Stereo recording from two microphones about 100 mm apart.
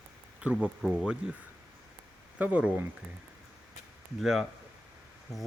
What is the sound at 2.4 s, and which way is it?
Speech, 15° right (ahead or behind).